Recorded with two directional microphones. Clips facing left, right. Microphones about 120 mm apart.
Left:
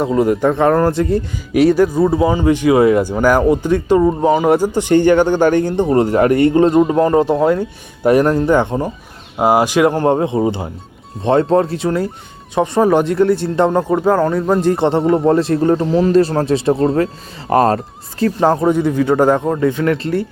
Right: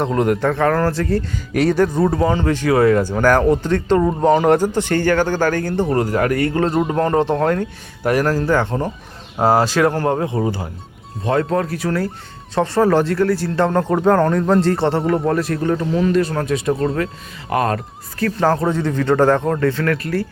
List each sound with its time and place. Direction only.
0.0 s speech: 5° left (ahead or behind)
0.4 s speech: 20° left (ahead or behind)
8.0 s speech: 25° left (ahead or behind)
18.2 s speech: 20° left (ahead or behind)